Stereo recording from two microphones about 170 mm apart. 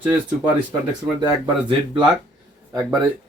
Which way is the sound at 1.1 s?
25° right (ahead or behind).